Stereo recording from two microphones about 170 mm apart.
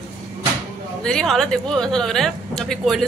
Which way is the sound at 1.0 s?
5° left (ahead or behind).